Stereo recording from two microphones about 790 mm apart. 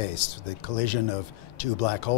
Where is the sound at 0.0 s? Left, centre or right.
Left.